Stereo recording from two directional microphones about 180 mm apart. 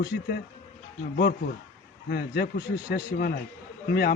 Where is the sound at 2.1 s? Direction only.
60° left (ahead or behind).